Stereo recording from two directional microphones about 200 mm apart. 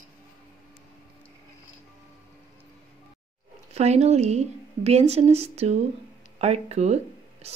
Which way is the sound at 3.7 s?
35° right (ahead or behind).